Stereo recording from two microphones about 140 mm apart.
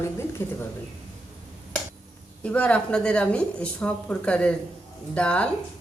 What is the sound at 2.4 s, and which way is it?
A woman's voice, 10° left (ahead or behind).